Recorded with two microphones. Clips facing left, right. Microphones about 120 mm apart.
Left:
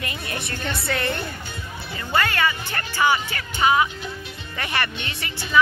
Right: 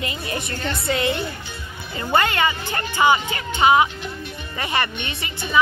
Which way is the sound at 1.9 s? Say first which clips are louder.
Right 3 dB; 25° right (ahead or behind).